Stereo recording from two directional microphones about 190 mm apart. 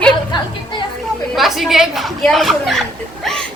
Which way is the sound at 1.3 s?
Centre (ahead or behind).